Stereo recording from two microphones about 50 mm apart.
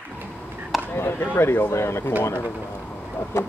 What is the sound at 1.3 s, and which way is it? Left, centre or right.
Speech, left.